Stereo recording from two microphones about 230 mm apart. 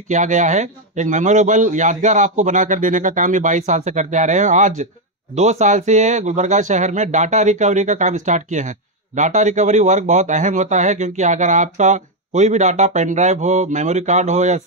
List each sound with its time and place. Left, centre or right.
0.1 s speech: right